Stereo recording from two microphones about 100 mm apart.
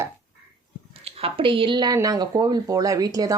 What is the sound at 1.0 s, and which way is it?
A woman's voice, 65° right (ahead or behind).